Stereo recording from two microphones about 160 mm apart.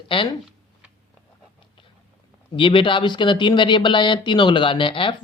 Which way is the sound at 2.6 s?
30° left (ahead or behind).